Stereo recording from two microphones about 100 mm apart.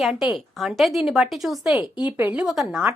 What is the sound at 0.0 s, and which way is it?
Speech, 5° right (ahead or behind).